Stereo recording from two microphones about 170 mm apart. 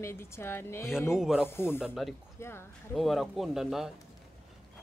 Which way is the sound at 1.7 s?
5° right (ahead or behind).